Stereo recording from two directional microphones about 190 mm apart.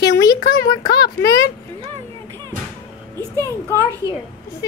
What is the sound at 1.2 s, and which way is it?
Speech, 20° left (ahead or behind).